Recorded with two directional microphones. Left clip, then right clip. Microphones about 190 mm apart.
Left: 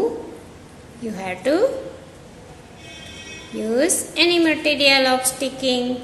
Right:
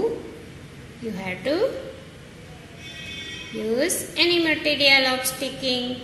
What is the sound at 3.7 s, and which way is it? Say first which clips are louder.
A woman's voice: left 4 dB; 25° left (ahead or behind).